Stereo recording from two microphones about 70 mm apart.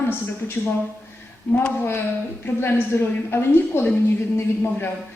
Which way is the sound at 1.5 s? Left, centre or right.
Left.